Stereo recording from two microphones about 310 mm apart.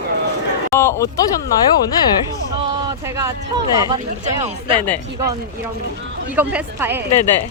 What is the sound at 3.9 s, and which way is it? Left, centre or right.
Speech, centre.